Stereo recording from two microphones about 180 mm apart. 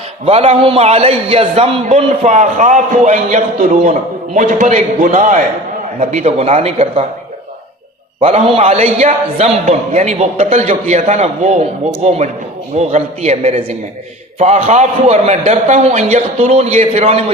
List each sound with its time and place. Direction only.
0.3 s a man's voice: 35° right (ahead or behind)
2.2 s a man's voice: 40° right (ahead or behind)
8.2 s a man's voice: 35° right (ahead or behind)